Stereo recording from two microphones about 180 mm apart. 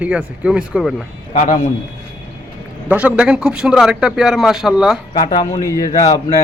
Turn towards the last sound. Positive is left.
turn(degrees=20)  # may be behind; listen again after turning